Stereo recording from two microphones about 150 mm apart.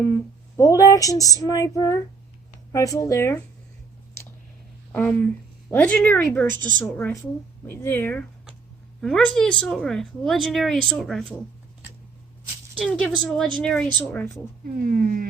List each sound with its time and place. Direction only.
0.5 s speech: 20° left (ahead or behind)
4.9 s speech: 10° left (ahead or behind)
9.0 s speech: 5° left (ahead or behind)
12.8 s speech: centre (ahead or behind)
14.8 s speech: 70° right (ahead or behind)